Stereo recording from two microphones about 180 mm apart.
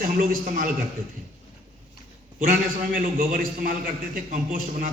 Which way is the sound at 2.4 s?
50° right (ahead or behind).